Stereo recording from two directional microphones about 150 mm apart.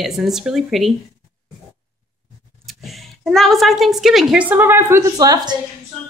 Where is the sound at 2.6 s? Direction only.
Centre (ahead or behind); by 5.6 s 25° right (ahead or behind).